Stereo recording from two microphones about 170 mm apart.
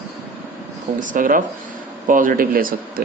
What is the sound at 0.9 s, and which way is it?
Speech, 50° right (ahead or behind).